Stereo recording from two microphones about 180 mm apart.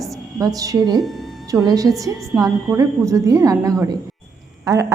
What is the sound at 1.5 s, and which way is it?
A woman's voice, 20° right (ahead or behind).